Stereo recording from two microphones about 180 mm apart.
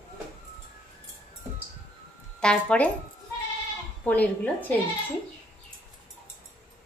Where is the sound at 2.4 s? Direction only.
5° left (ahead or behind).